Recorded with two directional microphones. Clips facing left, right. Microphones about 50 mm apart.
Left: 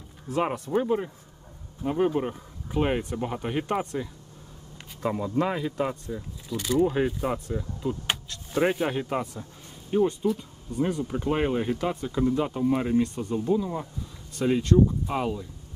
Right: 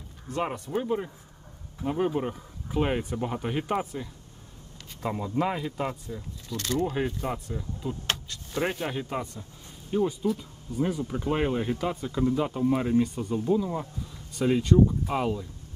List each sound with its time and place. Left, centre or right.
0.3 s speech: centre
5.0 s speech: centre
9.4 s a sound: centre
10.0 s speech: centre